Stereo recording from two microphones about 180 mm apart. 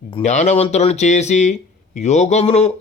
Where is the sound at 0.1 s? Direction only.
40° left (ahead or behind).